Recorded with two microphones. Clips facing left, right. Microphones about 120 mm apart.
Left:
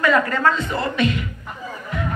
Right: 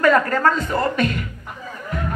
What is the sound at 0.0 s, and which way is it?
A man's voice, 45° right (ahead or behind).